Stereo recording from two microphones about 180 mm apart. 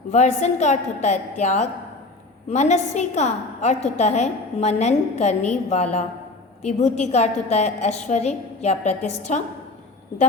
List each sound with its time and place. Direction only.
0.1 s a woman's voice: 40° left (ahead or behind)